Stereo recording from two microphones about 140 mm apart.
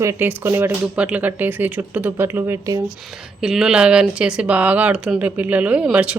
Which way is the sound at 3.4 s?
5° right (ahead or behind).